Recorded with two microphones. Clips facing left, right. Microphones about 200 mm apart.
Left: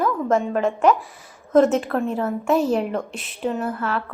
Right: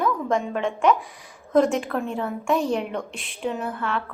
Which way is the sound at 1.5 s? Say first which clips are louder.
Left 3 dB; centre (ahead or behind).